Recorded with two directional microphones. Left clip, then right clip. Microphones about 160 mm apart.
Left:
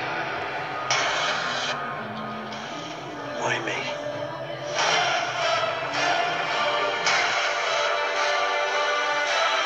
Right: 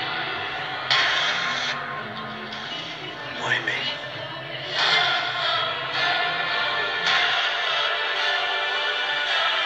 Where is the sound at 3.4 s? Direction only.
50° left (ahead or behind).